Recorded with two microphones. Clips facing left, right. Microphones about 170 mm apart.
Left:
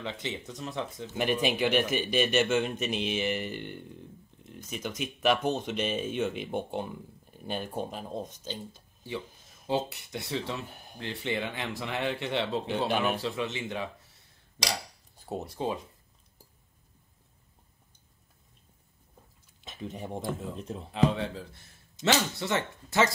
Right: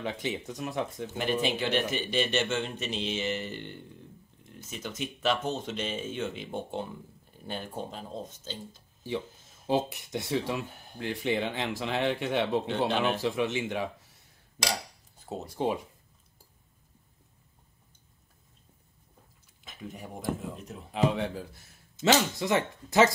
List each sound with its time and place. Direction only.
0.0 s speech: 15° right (ahead or behind)
1.1 s a man's voice: 15° left (ahead or behind)
9.7 s speech: 20° right (ahead or behind)
12.8 s a man's voice: 10° left (ahead or behind)
13.2 s speech: 15° right (ahead or behind)
15.5 s speech: 10° right (ahead or behind)
19.6 s speech: 20° left (ahead or behind)
20.9 s speech: 10° right (ahead or behind)